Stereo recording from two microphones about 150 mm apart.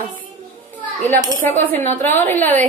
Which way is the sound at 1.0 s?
10° left (ahead or behind).